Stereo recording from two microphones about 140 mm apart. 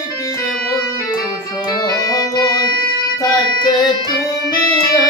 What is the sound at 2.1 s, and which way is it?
Music, 25° left (ahead or behind).